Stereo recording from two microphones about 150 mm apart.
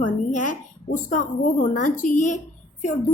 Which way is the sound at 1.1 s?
60° left (ahead or behind).